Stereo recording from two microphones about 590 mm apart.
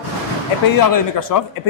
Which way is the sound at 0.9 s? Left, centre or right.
Left.